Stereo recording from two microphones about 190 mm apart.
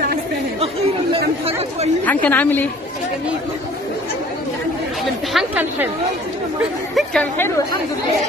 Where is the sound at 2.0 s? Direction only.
10° left (ahead or behind).